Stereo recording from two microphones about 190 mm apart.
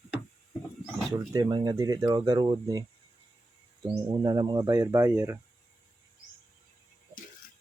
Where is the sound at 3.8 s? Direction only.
20° right (ahead or behind).